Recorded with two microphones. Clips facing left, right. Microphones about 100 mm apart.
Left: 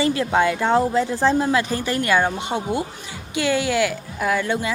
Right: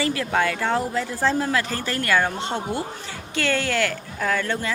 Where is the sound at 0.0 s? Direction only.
20° left (ahead or behind).